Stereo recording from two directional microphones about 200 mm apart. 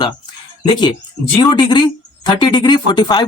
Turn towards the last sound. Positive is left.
turn(degrees=20)  # may be behind; listen again after turning